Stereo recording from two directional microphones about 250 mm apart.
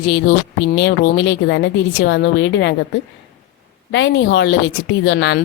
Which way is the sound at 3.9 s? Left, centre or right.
Left.